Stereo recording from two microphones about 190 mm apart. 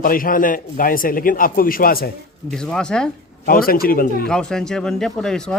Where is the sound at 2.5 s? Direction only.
5° left (ahead or behind).